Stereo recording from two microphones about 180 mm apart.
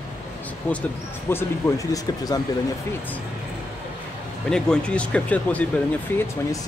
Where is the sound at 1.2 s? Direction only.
15° left (ahead or behind).